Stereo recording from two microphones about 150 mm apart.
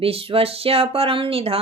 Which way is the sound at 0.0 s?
40° right (ahead or behind).